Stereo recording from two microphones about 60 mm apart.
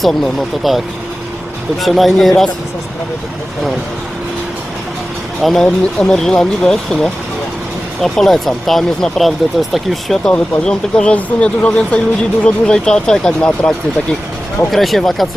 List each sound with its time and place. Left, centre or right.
0.0 s speech: centre
1.8 s speech: centre
5.4 s speech: centre
10.2 s speech: centre
14.7 s speech: centre